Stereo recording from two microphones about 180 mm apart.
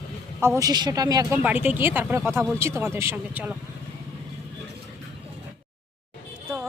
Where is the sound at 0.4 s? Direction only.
15° right (ahead or behind).